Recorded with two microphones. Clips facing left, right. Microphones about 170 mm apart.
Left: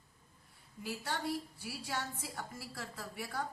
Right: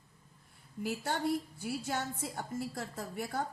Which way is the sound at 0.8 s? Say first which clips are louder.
Right 5 dB; 50° right (ahead or behind).